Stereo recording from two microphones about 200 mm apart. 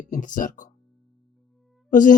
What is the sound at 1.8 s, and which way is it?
Speech, 40° left (ahead or behind).